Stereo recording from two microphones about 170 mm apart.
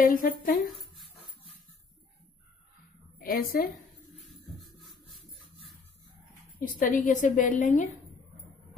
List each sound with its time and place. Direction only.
0.0 s speech: 55° left (ahead or behind)
3.2 s a woman's voice: 60° left (ahead or behind)
4.6 s music: centre (ahead or behind)
6.6 s a woman's voice: 50° left (ahead or behind)